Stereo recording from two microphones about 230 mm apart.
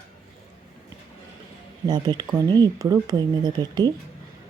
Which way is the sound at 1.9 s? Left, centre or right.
Centre.